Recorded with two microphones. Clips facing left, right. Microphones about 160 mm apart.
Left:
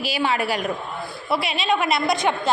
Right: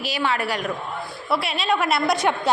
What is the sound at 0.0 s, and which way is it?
Speech, 10° left (ahead or behind).